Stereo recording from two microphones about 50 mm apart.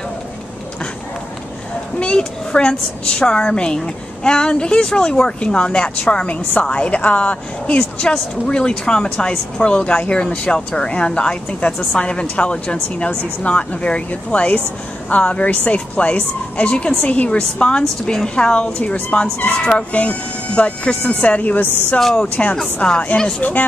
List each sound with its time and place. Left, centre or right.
2.0 s a woman's voice: left
19.9 s a woman's voice: left
22.0 s a woman's voice: centre
22.3 s a woman's voice: left